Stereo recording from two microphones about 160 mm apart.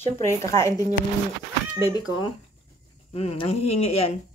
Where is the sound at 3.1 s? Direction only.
40° left (ahead or behind).